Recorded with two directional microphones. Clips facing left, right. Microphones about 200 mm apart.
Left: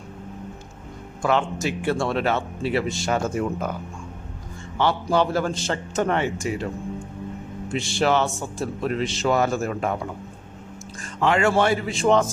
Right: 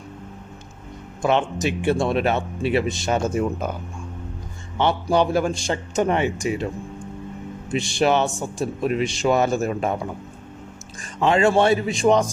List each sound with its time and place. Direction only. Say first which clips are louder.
1.2 s speech: right 2 dB; 20° right (ahead or behind)
5.0 s a man's voice: right 2 dB; 15° right (ahead or behind)
7.7 s a man's voice: right 2 dB; 15° right (ahead or behind)
11.0 s speech: right 2 dB; 20° right (ahead or behind)